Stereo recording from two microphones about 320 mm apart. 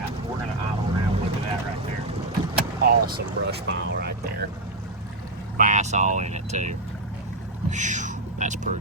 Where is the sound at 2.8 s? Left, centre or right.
Right.